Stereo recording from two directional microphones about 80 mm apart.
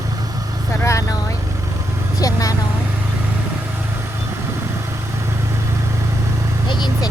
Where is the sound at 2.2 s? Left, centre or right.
Left.